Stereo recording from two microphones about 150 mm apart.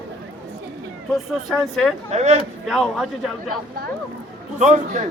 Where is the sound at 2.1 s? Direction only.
50° right (ahead or behind).